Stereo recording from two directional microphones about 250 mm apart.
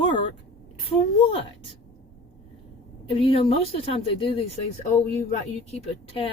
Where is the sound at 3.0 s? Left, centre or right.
Left.